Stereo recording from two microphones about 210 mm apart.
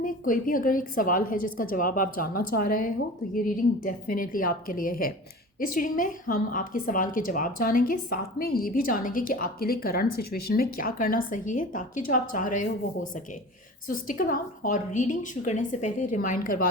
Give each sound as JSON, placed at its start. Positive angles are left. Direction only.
{"t": 0.0, "sound": "a woman's voice", "side_deg": 40}
{"t": 13.8, "sound": "a woman's voice", "side_deg": 40}